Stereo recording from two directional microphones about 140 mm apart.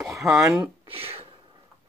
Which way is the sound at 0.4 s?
20° right (ahead or behind).